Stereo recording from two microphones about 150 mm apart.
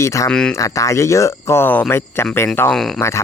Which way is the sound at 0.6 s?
20° left (ahead or behind).